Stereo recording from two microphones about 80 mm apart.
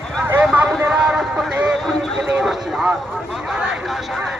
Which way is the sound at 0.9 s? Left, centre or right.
Centre.